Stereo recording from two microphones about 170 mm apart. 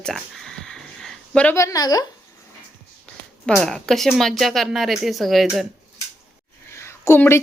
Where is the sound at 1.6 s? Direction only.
20° left (ahead or behind).